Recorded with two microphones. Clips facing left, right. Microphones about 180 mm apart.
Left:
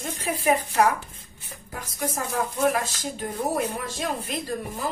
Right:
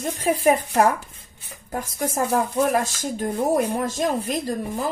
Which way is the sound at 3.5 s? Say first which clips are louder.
Right 6 dB; 45° right (ahead or behind).